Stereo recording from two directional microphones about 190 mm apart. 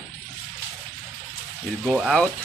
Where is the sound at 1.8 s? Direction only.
5° right (ahead or behind).